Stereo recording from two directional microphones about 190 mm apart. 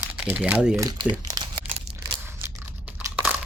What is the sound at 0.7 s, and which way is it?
Speech, 20° right (ahead or behind).